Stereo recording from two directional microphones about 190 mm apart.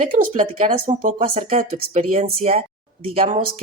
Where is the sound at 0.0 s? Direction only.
45° right (ahead or behind).